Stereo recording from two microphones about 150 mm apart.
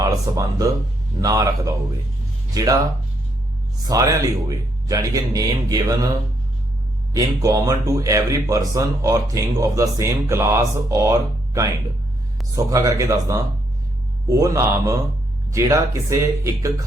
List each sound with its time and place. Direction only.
0.0 s speech: 25° right (ahead or behind)
3.8 s speech: 20° right (ahead or behind)
7.1 s speech: 20° right (ahead or behind)